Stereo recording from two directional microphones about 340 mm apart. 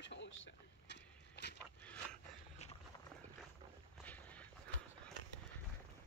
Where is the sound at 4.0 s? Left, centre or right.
Centre.